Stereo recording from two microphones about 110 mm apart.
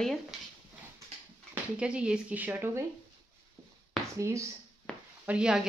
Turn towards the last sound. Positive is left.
turn(degrees=-10)  # may be behind; listen again after turning